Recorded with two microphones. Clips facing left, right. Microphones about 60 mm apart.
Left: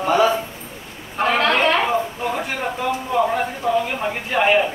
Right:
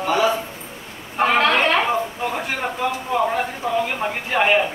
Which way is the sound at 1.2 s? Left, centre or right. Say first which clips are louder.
Right 1 dB; centre.